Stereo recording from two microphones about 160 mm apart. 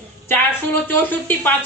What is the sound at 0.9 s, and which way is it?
Speech, 10° left (ahead or behind).